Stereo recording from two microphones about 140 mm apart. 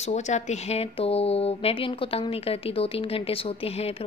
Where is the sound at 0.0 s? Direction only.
55° left (ahead or behind).